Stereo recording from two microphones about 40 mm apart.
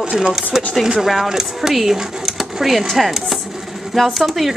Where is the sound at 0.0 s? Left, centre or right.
Right.